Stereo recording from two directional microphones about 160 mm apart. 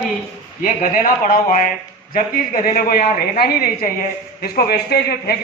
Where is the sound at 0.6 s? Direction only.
55° left (ahead or behind).